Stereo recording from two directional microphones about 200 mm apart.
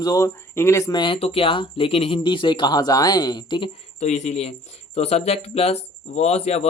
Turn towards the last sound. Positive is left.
turn(degrees=30)  # may be behind; listen again after turning